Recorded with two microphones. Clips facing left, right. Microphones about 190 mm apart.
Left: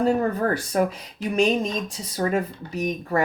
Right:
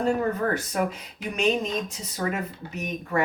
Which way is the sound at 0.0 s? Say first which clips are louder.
Left 3 dB; 35° left (ahead or behind).